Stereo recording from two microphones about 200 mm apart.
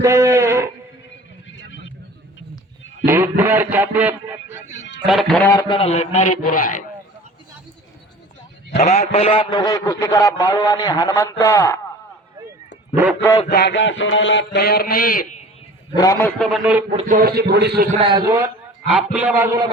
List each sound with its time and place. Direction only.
0.0 s a sound: 15° right (ahead or behind)
1.5 s vehicle: 70° left (ahead or behind)
3.1 s speech: 10° right (ahead or behind)
5.0 s a man's voice: centre (ahead or behind)
5.5 s a man's voice: 20° left (ahead or behind); by 6.7 s 45° left (ahead or behind)
8.8 s a man's voice: 35° left (ahead or behind); by 11.8 s 10° left (ahead or behind)
12.9 s a man's voice: 10° right (ahead or behind)
13.5 s a man's voice: 55° left (ahead or behind)
16.0 s a man's voice: 15° left (ahead or behind)
16.4 s a man's voice: centre (ahead or behind)
16.9 s a man's voice: 30° right (ahead or behind)
17.2 s a man's voice: 50° right (ahead or behind)
17.9 s a man's voice: 25° right (ahead or behind)